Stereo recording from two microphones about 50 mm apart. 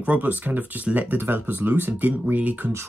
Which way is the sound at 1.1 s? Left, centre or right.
Right.